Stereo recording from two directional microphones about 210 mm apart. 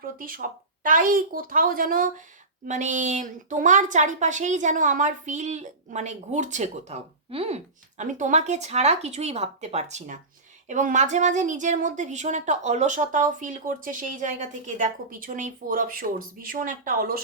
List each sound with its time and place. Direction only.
0.0 s a woman's voice: 45° right (ahead or behind)